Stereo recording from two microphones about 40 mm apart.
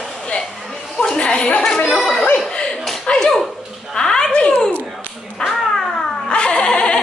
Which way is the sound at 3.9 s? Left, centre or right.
Centre.